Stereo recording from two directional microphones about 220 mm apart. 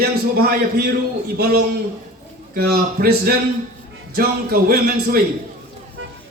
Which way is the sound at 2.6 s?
45° right (ahead or behind).